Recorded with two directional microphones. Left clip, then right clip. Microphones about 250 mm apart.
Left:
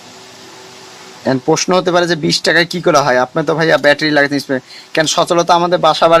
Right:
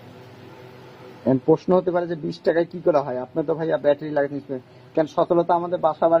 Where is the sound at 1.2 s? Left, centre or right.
Left.